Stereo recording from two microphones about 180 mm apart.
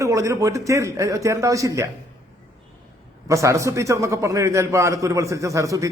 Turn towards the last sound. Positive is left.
turn(degrees=-15)  # may be behind; listen again after turning